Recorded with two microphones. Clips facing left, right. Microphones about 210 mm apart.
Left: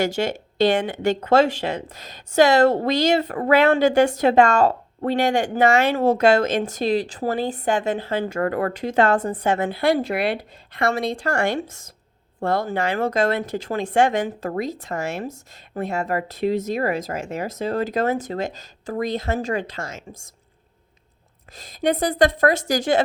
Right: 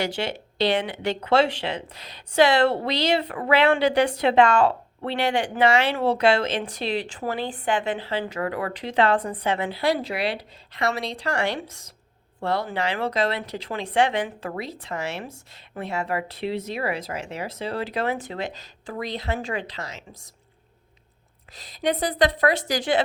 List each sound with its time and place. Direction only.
0.0 s speech: 45° left (ahead or behind)
21.5 s speech: 45° left (ahead or behind)